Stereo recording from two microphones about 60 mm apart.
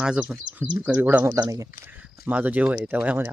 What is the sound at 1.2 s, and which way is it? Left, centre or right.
Speech, right.